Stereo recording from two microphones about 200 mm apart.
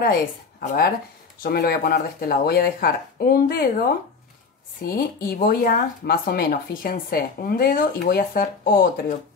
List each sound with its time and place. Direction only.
0.0 s speech: 45° left (ahead or behind)